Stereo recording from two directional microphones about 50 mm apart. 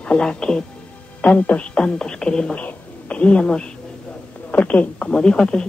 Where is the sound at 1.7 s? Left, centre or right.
Centre.